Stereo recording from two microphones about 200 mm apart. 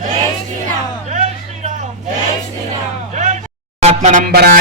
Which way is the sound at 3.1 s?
35° right (ahead or behind).